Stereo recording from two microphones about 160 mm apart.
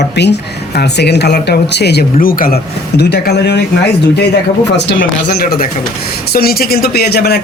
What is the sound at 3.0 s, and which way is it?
Speech, 90° left.